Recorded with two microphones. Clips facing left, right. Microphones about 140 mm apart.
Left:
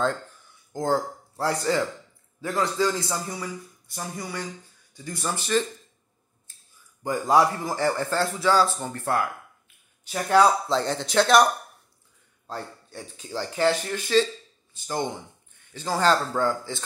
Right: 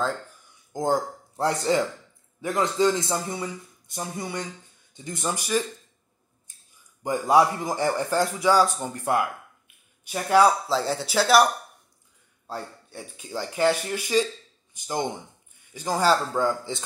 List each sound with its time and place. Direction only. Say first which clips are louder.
0.7 s a man's voice: even; 15° right (ahead or behind)
7.0 s a man's voice: right 1 dB; 15° right (ahead or behind)
12.4 s a man's voice: even; 10° right (ahead or behind)